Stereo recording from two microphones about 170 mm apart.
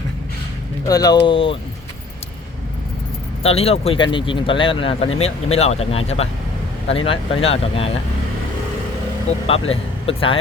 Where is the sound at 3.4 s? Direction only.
35° left (ahead or behind).